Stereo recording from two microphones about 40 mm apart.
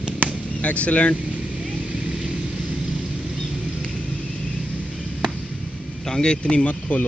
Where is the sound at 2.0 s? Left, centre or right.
Centre.